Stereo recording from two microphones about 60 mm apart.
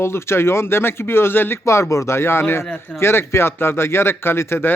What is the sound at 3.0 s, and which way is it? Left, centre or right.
A man's voice, left.